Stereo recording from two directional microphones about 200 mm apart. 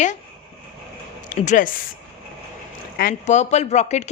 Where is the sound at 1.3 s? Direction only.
40° left (ahead or behind).